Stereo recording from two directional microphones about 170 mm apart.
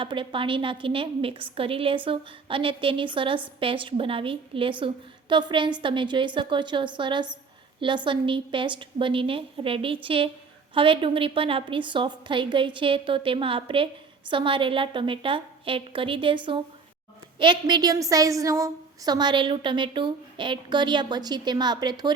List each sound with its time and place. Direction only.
0.0 s a woman's voice: 30° right (ahead or behind)